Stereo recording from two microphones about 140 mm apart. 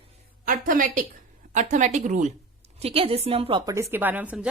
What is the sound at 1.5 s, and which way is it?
Speech, 60° right (ahead or behind).